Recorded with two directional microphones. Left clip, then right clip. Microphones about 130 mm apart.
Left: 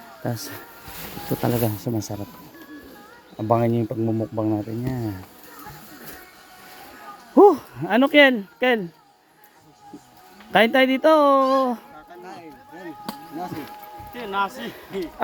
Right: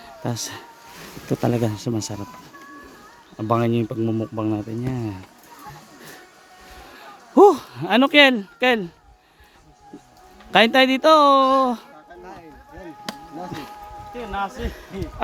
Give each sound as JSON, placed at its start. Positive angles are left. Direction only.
{"t": 0.2, "sound": "speech", "side_deg": -15}
{"t": 1.4, "sound": "speech", "side_deg": -40}
{"t": 3.5, "sound": "speech", "side_deg": -25}
{"t": 7.3, "sound": "a sound", "side_deg": -5}
{"t": 7.8, "sound": "speech", "side_deg": -15}
{"t": 10.5, "sound": "speech", "side_deg": -10}
{"t": 12.2, "sound": "a sound", "side_deg": 15}
{"t": 12.8, "sound": "chop", "side_deg": 0}
{"t": 14.1, "sound": "a man's voice", "side_deg": -10}